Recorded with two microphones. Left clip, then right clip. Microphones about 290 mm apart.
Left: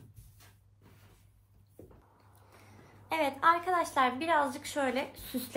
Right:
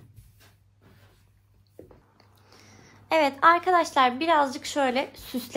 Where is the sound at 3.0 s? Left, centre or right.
Centre.